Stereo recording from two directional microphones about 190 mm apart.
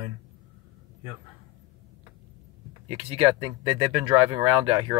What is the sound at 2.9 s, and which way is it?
Speech, 30° right (ahead or behind).